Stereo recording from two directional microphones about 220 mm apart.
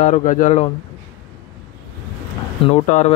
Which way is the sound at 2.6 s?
30° left (ahead or behind).